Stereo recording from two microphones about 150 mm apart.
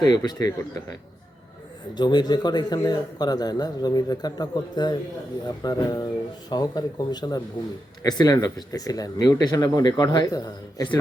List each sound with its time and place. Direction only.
0.0 s a man's voice: 25° left (ahead or behind)
2.0 s a man's voice: 30° left (ahead or behind)